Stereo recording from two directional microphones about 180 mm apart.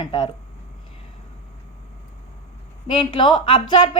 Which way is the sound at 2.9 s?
30° left (ahead or behind).